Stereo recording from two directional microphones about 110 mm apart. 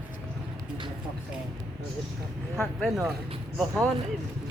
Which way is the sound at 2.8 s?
5° right (ahead or behind).